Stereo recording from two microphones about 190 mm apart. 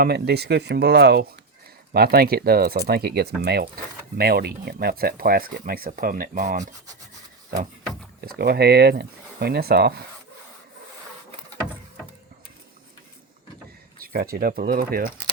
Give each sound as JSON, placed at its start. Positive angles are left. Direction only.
{"t": 0.0, "sound": "speech", "side_deg": -60}
{"t": 8.2, "sound": "speech", "side_deg": -55}
{"t": 14.0, "sound": "speech", "side_deg": -50}